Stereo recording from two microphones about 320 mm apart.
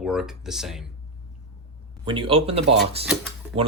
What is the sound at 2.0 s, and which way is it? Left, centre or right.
Speech, centre.